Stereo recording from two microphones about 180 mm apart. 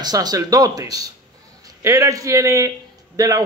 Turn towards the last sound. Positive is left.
turn(degrees=-20)  # may be behind; listen again after turning